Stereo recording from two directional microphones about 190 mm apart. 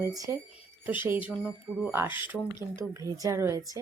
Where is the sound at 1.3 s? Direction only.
5° right (ahead or behind).